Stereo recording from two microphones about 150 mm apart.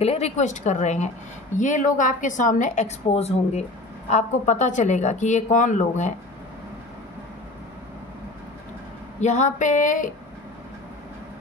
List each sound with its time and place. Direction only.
0.0 s a woman's voice: 45° left (ahead or behind)
9.2 s a woman's voice: 50° left (ahead or behind)